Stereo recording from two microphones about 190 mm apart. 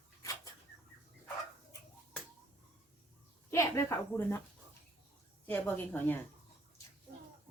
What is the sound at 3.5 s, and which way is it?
Speech, 15° left (ahead or behind).